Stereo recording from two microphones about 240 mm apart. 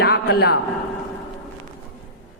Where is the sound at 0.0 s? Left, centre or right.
Left.